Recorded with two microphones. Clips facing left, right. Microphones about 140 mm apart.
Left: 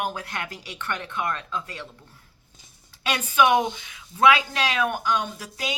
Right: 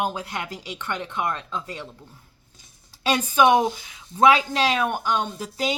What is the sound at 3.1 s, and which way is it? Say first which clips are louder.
A woman's voice: right 3 dB; 35° right (ahead or behind).